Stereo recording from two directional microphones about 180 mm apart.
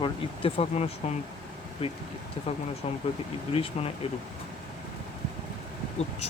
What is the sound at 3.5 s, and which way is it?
Speech, 30° left (ahead or behind).